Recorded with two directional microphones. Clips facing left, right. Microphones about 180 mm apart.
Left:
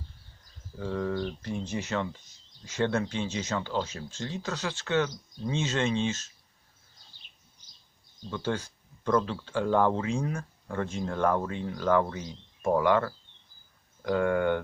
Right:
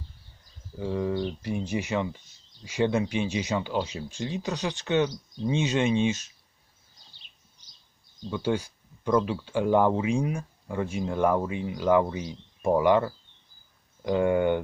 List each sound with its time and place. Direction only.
0.8 s speech: 15° right (ahead or behind)
8.3 s speech: 15° right (ahead or behind)